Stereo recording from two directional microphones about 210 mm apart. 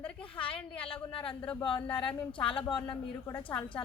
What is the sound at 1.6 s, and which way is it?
Speech, 25° left (ahead or behind).